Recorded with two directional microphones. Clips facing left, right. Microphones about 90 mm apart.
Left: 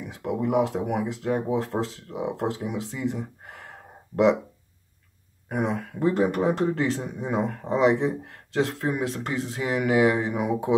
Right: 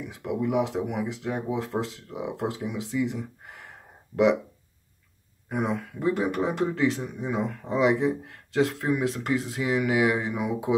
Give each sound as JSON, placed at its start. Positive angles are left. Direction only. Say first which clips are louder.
{"t": 0.1, "sound": "speech", "louder": "left 2 dB", "side_deg": 35}
{"t": 5.6, "sound": "speech", "louder": "left 3 dB", "side_deg": 30}
{"t": 7.7, "sound": "speech", "louder": "left 1 dB", "side_deg": 30}